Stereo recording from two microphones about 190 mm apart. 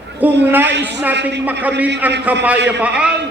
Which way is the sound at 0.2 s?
10° right (ahead or behind).